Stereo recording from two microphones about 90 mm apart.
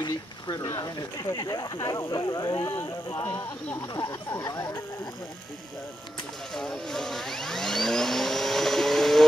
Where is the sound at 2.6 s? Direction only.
30° left (ahead or behind).